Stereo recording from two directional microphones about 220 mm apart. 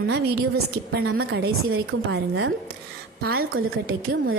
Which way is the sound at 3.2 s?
45° right (ahead or behind).